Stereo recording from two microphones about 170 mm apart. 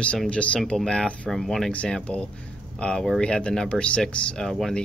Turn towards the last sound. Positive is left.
turn(degrees=0)  # may be behind; listen again after turning